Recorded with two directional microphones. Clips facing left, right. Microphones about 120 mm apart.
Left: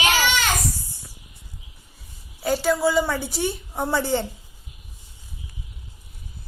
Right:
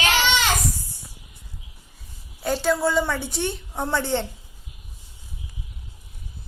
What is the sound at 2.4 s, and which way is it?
A woman's voice, 5° left (ahead or behind).